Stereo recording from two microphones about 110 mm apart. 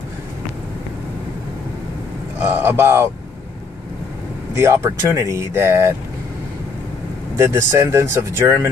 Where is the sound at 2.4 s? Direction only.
20° right (ahead or behind).